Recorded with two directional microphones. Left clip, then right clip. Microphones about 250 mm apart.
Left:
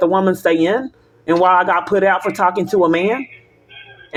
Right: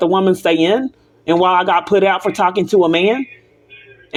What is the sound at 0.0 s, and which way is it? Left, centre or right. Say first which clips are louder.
Speech: right 1 dB; centre.